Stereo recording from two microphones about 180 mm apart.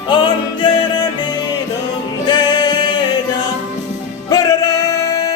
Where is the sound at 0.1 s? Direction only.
25° left (ahead or behind).